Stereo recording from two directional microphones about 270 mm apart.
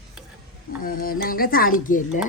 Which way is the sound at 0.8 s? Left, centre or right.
Left.